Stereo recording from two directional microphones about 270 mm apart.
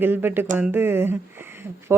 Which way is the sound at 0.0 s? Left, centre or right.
Centre.